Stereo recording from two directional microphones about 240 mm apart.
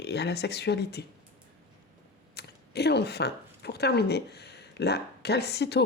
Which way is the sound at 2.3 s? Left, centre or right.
Left.